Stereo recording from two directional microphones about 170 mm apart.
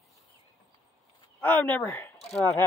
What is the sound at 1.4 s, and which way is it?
Speech, 10° left (ahead or behind).